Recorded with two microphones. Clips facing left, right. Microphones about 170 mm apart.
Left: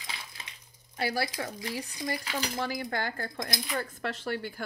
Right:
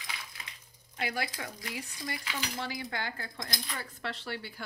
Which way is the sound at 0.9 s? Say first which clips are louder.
Left 4 dB; 35° left (ahead or behind).